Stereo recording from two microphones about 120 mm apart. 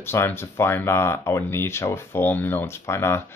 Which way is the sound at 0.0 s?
20° left (ahead or behind).